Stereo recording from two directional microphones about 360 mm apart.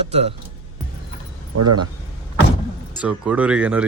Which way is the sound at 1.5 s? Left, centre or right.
Right.